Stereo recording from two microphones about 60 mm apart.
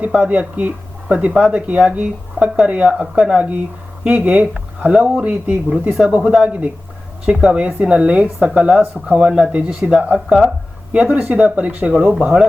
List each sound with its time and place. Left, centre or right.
0.0 s speech: right
4.4 s speech: centre